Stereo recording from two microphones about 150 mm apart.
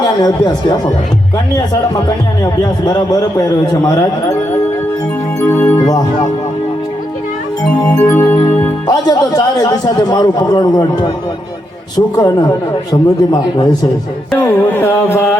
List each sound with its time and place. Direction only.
0.0 s a man's voice: 25° left (ahead or behind)
5.4 s speech: 10° left (ahead or behind)
7.9 s carnatic music: 10° left (ahead or behind)
8.9 s a man's voice: 25° left (ahead or behind)
14.3 s carnatic music: 10° left (ahead or behind)